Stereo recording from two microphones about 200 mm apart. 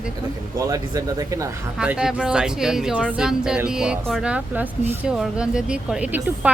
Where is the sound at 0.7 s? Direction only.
15° right (ahead or behind).